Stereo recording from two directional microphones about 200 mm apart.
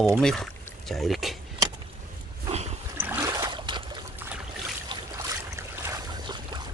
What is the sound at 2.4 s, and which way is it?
Dog, 30° right (ahead or behind).